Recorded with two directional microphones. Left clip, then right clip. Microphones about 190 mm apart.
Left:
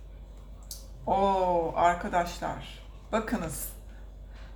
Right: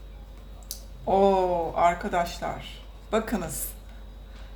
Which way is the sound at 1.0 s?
30° right (ahead or behind).